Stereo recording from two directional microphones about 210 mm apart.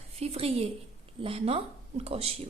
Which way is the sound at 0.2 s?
30° right (ahead or behind).